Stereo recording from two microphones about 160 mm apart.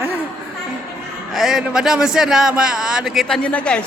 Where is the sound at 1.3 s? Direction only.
Centre (ahead or behind).